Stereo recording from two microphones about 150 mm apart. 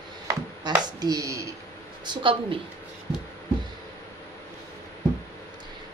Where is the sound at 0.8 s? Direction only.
25° right (ahead or behind).